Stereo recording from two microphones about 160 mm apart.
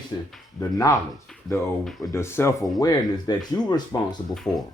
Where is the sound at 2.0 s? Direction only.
15° left (ahead or behind).